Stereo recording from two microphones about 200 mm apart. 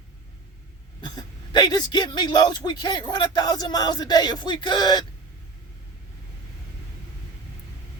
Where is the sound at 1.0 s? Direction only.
20° left (ahead or behind).